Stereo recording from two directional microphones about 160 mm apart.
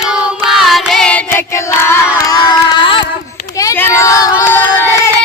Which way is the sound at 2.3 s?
30° left (ahead or behind).